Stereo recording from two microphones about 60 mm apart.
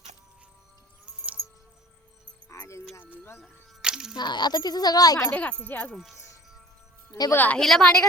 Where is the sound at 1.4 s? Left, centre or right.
Left.